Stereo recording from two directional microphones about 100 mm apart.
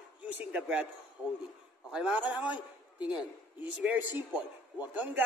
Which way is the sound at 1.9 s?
5° right (ahead or behind).